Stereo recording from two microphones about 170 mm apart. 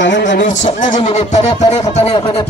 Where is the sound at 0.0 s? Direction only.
90° left.